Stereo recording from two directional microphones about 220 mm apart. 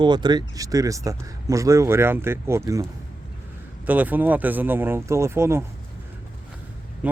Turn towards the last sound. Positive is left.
turn(degrees=-5)  # may be behind; listen again after turning